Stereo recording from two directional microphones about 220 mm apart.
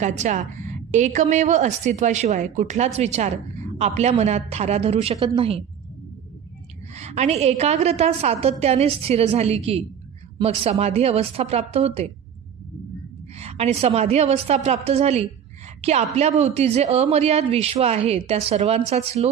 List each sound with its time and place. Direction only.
0.0 s a woman's voice: 30° right (ahead or behind)
7.0 s speech: 30° right (ahead or behind)
13.4 s speech: 30° right (ahead or behind)